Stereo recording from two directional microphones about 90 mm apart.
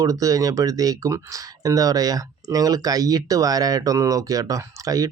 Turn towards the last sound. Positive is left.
turn(degrees=-40)  # may be behind; listen again after turning